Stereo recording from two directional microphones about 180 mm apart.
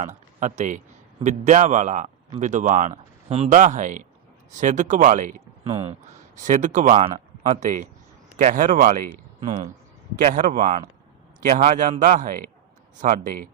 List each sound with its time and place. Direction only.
0.3 s speech: 45° right (ahead or behind)